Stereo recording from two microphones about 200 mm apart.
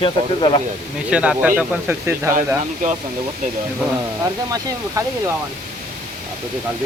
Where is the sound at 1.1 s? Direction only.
5° right (ahead or behind).